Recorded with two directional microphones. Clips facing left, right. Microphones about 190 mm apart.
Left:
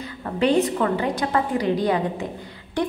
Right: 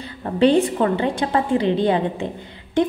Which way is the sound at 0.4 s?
30° right (ahead or behind).